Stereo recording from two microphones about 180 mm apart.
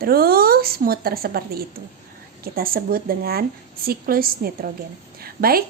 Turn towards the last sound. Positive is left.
turn(degrees=-55)  # may be behind; listen again after turning